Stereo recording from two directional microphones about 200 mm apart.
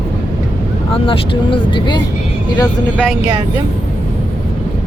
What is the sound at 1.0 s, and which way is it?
Speech, 25° left (ahead or behind).